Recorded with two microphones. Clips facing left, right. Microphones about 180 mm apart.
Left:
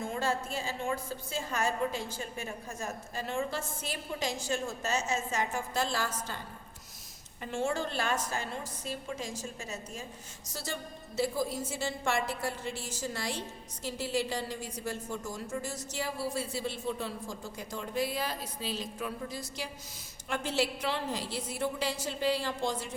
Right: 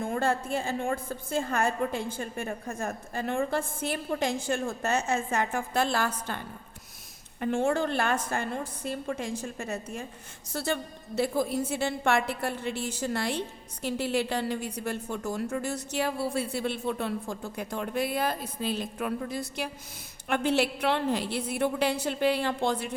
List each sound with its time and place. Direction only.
0.0 s a woman's voice: 55° right (ahead or behind)